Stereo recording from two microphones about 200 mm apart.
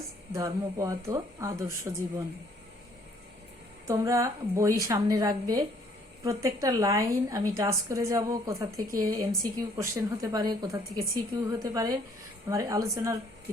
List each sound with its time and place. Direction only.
0.3 s a woman's voice: 15° right (ahead or behind)
3.8 s a woman's voice: 15° right (ahead or behind)